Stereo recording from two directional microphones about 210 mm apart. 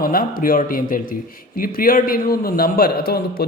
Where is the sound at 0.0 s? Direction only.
40° left (ahead or behind).